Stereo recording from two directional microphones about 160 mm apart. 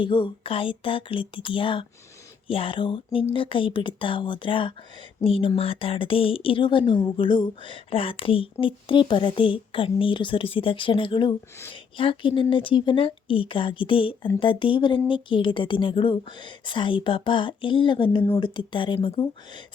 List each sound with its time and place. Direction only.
0.0 s speech: 30° left (ahead or behind)